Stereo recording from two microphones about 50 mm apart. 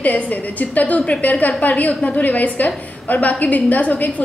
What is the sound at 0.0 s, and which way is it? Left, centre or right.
A woman's voice, left.